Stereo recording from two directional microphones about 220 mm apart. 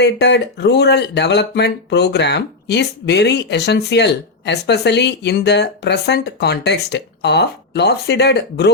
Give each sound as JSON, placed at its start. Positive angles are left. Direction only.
{"t": 0.0, "sound": "speech", "side_deg": 50}